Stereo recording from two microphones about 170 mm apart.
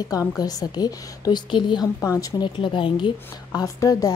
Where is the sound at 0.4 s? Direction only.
20° left (ahead or behind).